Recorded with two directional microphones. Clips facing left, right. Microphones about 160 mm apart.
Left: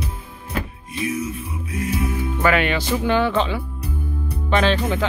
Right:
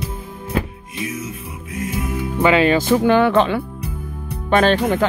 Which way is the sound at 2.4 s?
25° right (ahead or behind).